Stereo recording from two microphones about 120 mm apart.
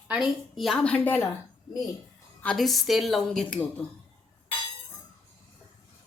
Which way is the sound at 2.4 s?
Centre (ahead or behind).